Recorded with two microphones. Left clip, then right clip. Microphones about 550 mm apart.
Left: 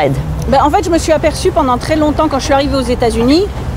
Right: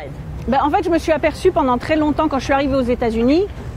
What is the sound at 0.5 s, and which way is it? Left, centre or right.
Speech, right.